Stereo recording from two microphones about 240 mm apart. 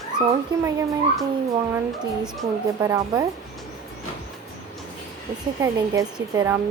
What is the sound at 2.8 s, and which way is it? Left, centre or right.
Speech, centre.